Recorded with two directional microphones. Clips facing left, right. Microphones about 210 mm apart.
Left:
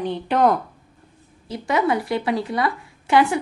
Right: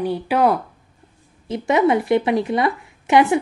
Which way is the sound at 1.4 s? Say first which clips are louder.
Right 4 dB; 25° right (ahead or behind).